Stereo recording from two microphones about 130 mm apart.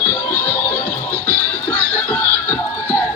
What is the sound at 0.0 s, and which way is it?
Music, 15° left (ahead or behind).